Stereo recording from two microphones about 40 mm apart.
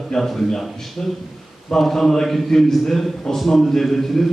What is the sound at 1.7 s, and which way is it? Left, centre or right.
A man's voice, centre.